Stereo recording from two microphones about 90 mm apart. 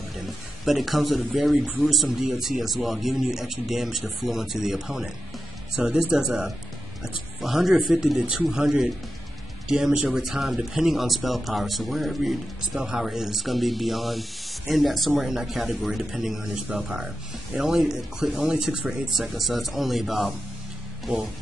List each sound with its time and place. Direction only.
0.7 s speech: centre (ahead or behind)